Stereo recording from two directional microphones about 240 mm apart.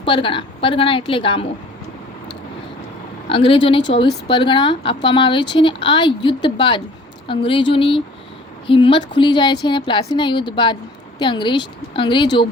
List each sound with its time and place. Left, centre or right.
0.0 s speech: left
3.2 s speech: left